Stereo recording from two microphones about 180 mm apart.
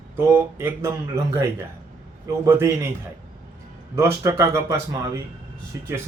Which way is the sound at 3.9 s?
15° right (ahead or behind).